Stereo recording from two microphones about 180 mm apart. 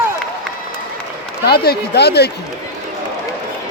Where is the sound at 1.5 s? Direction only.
65° left (ahead or behind).